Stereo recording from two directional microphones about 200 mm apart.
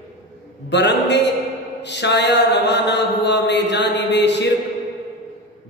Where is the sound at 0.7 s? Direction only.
60° left (ahead or behind).